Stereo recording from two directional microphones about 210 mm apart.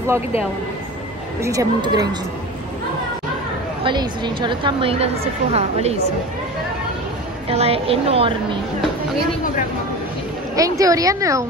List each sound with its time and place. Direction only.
1.4 s a woman's voice: 15° right (ahead or behind)
3.8 s a woman's voice: 20° right (ahead or behind)
7.4 s a woman's voice: 30° right (ahead or behind)
10.5 s a woman's voice: 15° right (ahead or behind)